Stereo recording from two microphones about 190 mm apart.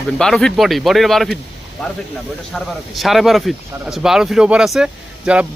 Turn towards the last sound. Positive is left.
turn(degrees=-5)  # may be behind; listen again after turning